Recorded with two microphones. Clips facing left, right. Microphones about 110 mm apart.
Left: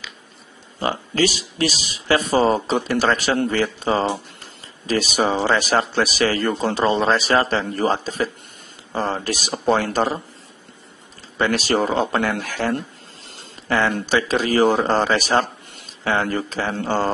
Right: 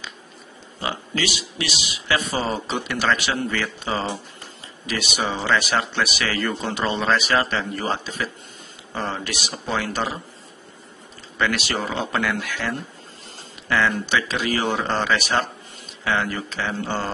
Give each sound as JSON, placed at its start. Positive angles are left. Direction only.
{"t": 0.7, "sound": "speech", "side_deg": 40}
{"t": 11.3, "sound": "speech", "side_deg": 35}